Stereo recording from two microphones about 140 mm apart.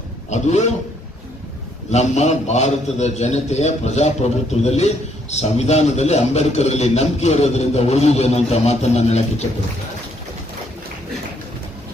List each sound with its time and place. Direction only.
0.3 s speech: 55° left (ahead or behind)
1.9 s a man's voice: 55° left (ahead or behind)